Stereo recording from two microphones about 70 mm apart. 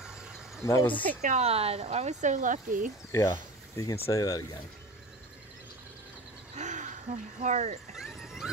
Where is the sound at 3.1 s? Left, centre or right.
Left.